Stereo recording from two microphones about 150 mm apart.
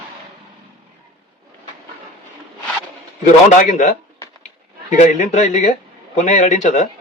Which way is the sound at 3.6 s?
55° left (ahead or behind).